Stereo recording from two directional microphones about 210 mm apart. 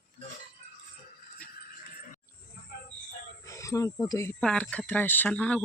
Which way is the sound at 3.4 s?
15° left (ahead or behind).